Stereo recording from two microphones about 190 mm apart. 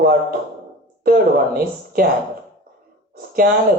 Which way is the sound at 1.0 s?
50° right (ahead or behind).